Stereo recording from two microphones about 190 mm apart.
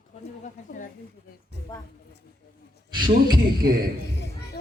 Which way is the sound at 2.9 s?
25° right (ahead or behind).